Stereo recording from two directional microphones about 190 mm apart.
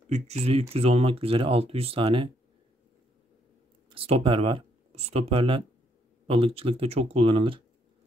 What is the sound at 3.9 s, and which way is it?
Speech, 30° right (ahead or behind).